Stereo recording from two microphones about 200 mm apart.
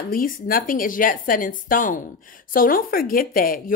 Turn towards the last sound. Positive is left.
turn(degrees=45)  # may be behind; listen again after turning